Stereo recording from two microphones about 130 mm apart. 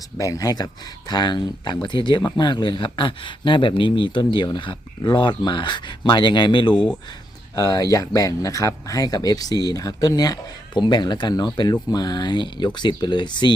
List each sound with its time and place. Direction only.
0.2 s speech: 25° left (ahead or behind)